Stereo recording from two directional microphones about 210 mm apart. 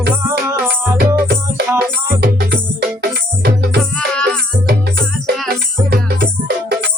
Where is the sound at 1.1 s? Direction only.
50° right (ahead or behind).